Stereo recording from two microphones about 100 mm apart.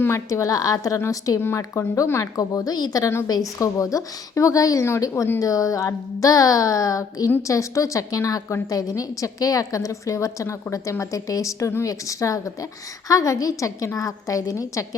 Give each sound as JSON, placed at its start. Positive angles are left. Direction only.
{"t": 0.0, "sound": "a woman's voice", "side_deg": 30}